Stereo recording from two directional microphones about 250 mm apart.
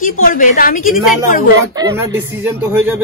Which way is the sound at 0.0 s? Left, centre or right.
Left.